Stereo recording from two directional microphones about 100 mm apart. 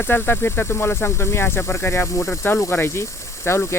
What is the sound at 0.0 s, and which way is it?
Speech, 25° left (ahead or behind).